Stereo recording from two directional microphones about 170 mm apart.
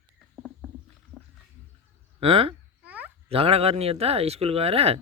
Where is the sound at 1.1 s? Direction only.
15° right (ahead or behind).